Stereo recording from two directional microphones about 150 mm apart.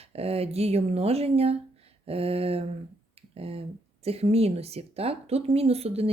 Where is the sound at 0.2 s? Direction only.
40° right (ahead or behind).